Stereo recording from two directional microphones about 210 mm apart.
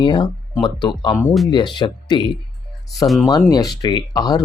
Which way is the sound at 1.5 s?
20° left (ahead or behind).